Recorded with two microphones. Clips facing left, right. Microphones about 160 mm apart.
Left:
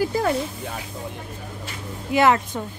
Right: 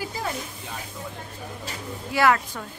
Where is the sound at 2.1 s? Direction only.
20° left (ahead or behind).